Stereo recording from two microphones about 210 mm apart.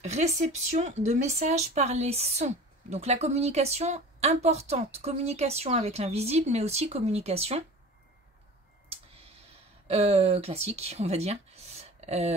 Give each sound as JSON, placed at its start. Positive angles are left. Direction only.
{"t": 0.0, "sound": "speech", "side_deg": -35}
{"t": 9.8, "sound": "speech", "side_deg": -30}